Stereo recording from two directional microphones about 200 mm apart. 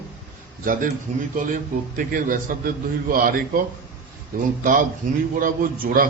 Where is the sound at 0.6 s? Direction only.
40° right (ahead or behind).